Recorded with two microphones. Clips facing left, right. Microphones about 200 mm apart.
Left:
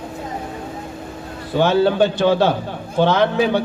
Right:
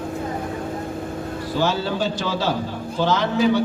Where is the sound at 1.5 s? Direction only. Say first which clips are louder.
Left 8 dB; 60° left (ahead or behind).